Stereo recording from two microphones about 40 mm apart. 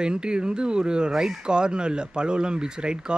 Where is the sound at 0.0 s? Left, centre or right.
Right.